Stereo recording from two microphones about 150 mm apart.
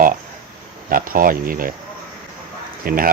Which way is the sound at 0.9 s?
70° right (ahead or behind).